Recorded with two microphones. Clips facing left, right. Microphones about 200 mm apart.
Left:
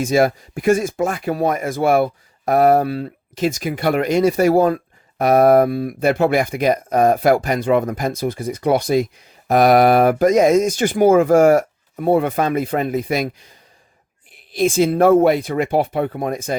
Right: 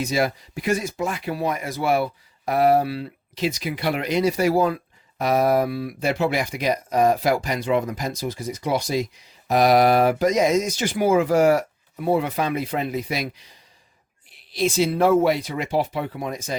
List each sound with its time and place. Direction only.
0.0 s speech: 50° left (ahead or behind)